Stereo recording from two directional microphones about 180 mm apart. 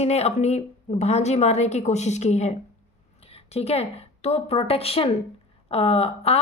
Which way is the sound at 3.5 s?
35° left (ahead or behind).